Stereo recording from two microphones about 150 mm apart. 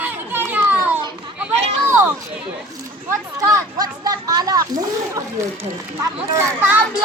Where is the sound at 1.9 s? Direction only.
15° right (ahead or behind).